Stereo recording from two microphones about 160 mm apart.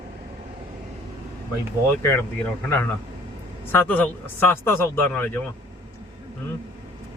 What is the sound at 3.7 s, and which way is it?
A man's voice, 10° left (ahead or behind).